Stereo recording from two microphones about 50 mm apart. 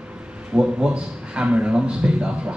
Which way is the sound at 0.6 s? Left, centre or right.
Centre.